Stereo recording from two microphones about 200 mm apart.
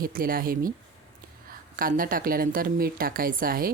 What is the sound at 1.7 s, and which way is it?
A woman's voice, 45° right (ahead or behind).